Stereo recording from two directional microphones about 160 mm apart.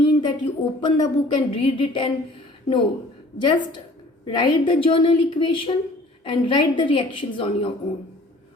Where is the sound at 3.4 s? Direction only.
30° left (ahead or behind).